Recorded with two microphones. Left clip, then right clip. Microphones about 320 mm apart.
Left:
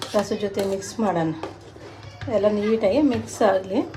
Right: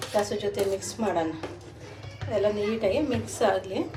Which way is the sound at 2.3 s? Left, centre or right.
Left.